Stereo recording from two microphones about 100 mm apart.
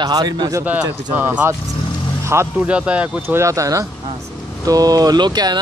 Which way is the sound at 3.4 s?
30° right (ahead or behind).